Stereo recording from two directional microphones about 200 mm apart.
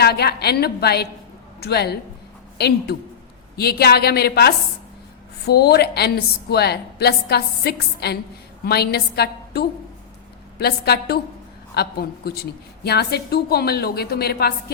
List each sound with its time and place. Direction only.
0.0 s a woman's voice: 55° left (ahead or behind)